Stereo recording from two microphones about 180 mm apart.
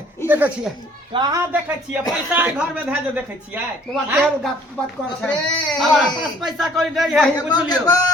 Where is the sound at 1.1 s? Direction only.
25° right (ahead or behind).